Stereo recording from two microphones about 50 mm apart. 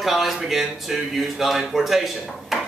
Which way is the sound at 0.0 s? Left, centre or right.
Centre.